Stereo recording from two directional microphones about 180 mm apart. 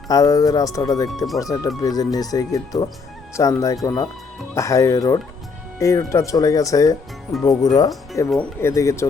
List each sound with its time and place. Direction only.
0.1 s speech: 20° left (ahead or behind)
8.3 s speech: 10° left (ahead or behind)